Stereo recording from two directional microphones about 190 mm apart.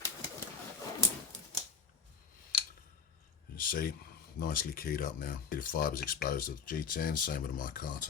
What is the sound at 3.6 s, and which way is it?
Speech, 50° left (ahead or behind).